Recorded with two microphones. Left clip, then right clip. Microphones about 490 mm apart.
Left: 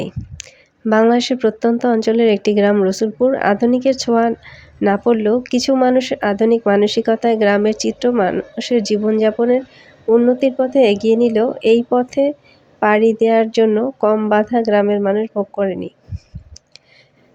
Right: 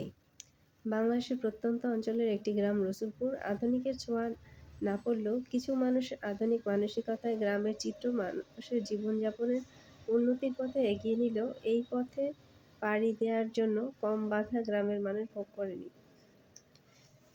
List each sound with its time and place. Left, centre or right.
0.0 s speech: centre